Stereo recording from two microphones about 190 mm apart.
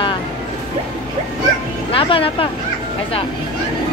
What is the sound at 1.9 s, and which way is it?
Music, 30° left (ahead or behind).